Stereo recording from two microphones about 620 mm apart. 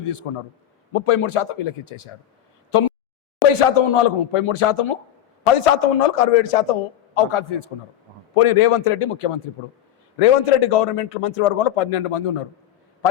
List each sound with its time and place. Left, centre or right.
0.0 s a man's voice: left
3.5 s a man's voice: left
7.2 s a man's voice: left